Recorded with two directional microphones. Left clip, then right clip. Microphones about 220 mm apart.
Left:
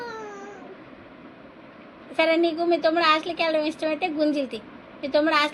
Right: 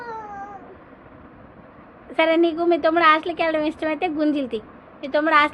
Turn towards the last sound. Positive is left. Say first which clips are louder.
# right 3 dB
turn(degrees=-30)  # may be behind; listen again after turning